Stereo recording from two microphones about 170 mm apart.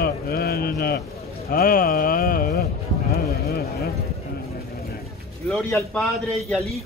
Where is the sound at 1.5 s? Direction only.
55° left (ahead or behind).